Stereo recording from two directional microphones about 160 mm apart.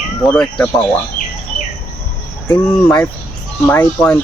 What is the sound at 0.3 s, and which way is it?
Speech, 5° left (ahead or behind).